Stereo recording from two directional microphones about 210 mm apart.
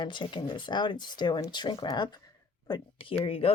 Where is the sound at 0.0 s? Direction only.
20° left (ahead or behind).